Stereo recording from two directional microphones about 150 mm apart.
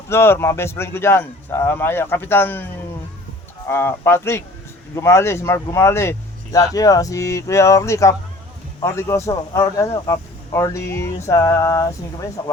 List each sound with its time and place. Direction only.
0.1 s speech: 15° left (ahead or behind)
3.7 s speech: 15° left (ahead or behind)